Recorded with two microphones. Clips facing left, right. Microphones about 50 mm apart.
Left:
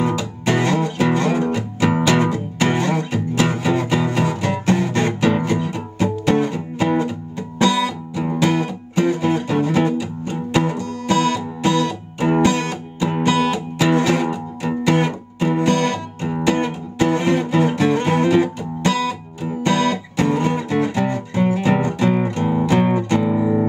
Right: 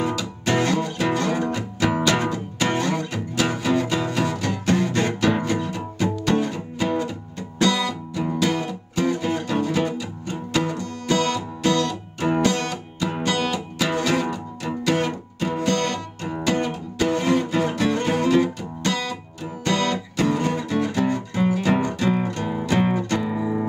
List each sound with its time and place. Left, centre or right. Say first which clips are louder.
0.0 s music: left 4 dB; centre
23.0 s music: left 6 dB; left